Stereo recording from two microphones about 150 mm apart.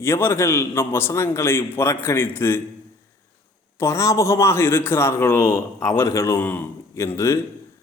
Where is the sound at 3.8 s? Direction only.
20° left (ahead or behind).